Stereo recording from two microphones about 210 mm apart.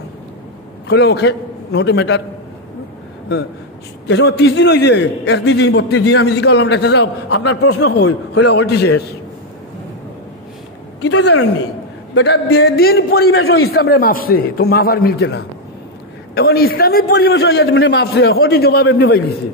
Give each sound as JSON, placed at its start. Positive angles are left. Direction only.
{"t": 0.8, "sound": "a man's voice", "side_deg": 55}
{"t": 4.1, "sound": "a man's voice", "side_deg": 55}
{"t": 7.4, "sound": "a man's voice", "side_deg": 90}
{"t": 8.5, "sound": "a man's voice", "side_deg": 50}
{"t": 11.0, "sound": "a woman's voice", "side_deg": 80}
{"t": 12.1, "sound": "a man's voice", "side_deg": 55}